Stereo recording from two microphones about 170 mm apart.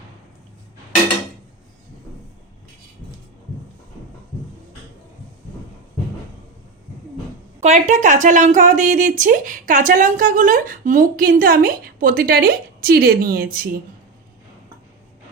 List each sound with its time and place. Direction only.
7.6 s a woman's voice: 45° right (ahead or behind); by 13.7 s 60° right (ahead or behind)